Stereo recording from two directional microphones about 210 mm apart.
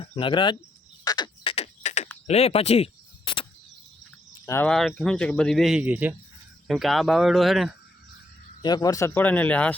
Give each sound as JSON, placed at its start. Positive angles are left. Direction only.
{"t": 0.0, "sound": "speech", "side_deg": 25}
{"t": 1.0, "sound": "frog", "side_deg": 20}
{"t": 2.2, "sound": "a sound", "side_deg": 30}
{"t": 4.4, "sound": "speech", "side_deg": 10}
{"t": 8.6, "sound": "speech", "side_deg": 20}